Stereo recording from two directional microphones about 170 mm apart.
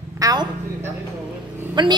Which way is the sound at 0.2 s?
20° right (ahead or behind).